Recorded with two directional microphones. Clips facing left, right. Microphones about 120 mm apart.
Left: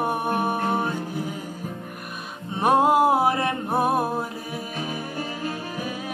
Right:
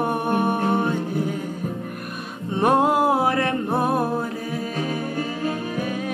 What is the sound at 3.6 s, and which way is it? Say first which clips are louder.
Music: right 1 dB; 10° left (ahead or behind).